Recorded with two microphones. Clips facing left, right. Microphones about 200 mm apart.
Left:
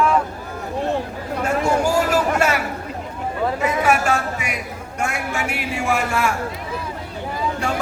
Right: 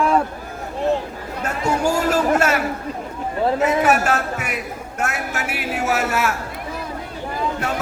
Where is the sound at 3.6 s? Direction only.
5° right (ahead or behind).